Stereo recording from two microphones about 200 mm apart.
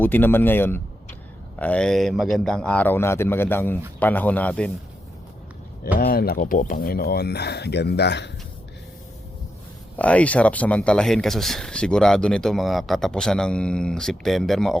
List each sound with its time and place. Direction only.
0.0 s a man's voice: 10° left (ahead or behind)
6.0 s speech: 50° left (ahead or behind)
10.0 s speech: 5° left (ahead or behind)